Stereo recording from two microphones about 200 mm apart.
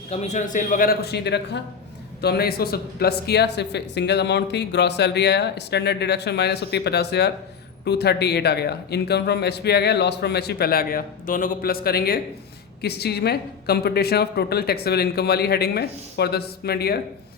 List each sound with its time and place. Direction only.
0.1 s a woman's voice: 35° left (ahead or behind); by 17.0 s 50° left (ahead or behind)